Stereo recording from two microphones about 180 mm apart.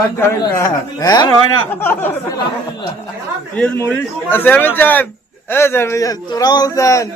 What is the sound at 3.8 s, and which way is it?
A man's voice, 10° left (ahead or behind).